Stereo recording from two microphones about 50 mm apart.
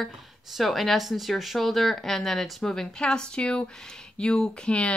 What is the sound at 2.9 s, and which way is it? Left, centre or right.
Speech, centre.